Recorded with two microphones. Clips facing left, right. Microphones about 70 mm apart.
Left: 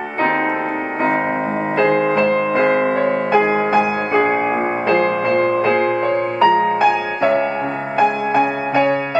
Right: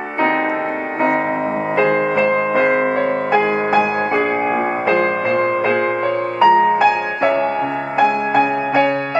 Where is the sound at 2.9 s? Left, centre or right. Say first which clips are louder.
Left 1 dB; centre.